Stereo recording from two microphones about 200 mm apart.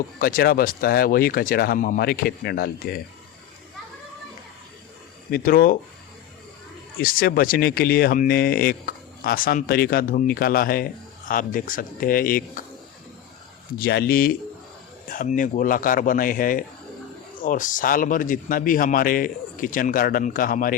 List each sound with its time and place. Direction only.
0.2 s a man's voice: 45° left (ahead or behind)
5.3 s a man's voice: 45° left (ahead or behind)
7.0 s a man's voice: 45° left (ahead or behind)
13.7 s a man's voice: 50° left (ahead or behind)